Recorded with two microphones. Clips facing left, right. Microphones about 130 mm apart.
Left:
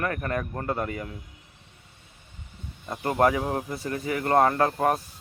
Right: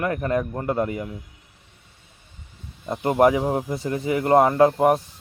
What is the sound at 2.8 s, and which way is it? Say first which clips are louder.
A man's voice: right 5 dB; 20° right (ahead or behind).